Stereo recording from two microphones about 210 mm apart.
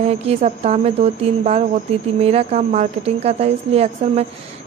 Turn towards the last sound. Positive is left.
turn(degrees=-30)  # may be behind; listen again after turning